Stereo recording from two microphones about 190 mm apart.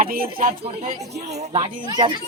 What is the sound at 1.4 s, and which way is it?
Speech, 35° right (ahead or behind).